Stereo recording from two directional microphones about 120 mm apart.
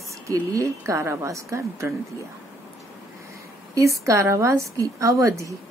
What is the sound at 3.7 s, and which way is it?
A woman's voice, 25° right (ahead or behind).